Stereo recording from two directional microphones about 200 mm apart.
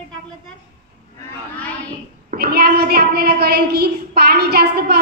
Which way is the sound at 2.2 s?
50° right (ahead or behind).